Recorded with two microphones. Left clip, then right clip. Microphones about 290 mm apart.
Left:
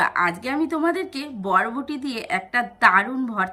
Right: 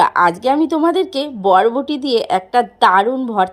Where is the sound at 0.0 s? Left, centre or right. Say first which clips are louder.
Right 9 dB; right.